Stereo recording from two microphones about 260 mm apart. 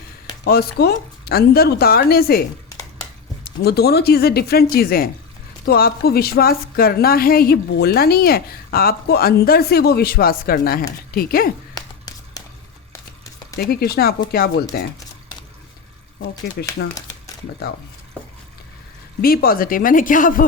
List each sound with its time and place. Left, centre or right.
0.4 s a woman's voice: left
3.4 s a woman's voice: left
13.6 s a woman's voice: left
16.6 s a woman's voice: left
19.2 s a woman's voice: left